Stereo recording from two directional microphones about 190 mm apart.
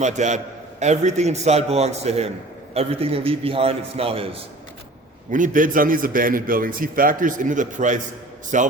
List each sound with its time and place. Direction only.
0.0 s a man's voice: 40° right (ahead or behind)
5.3 s a man's voice: 45° right (ahead or behind)